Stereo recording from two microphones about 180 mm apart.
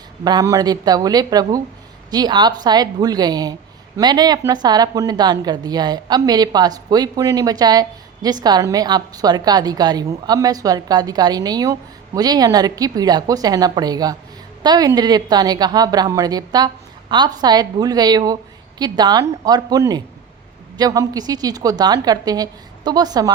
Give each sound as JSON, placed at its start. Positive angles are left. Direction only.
{"t": 0.3, "sound": "a woman's voice", "side_deg": -20}